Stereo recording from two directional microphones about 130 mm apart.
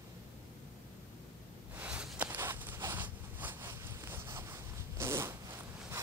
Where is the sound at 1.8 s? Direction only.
10° right (ahead or behind).